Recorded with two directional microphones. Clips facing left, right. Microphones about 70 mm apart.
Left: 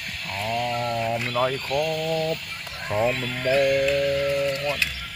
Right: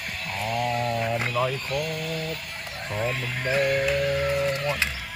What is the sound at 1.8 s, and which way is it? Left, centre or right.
Speech, left.